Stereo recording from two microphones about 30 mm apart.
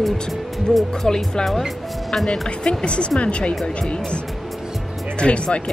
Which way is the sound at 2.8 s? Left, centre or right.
Left.